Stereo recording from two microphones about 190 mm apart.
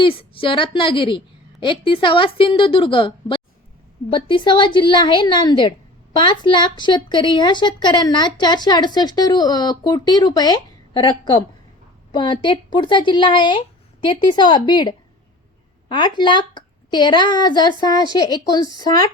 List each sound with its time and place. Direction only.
0.0 s a woman's voice: 30° left (ahead or behind)
12.1 s a woman's voice: 25° left (ahead or behind)